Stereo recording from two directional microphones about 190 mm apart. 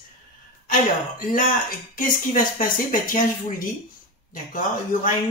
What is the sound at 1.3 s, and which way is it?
Speech, 45° left (ahead or behind).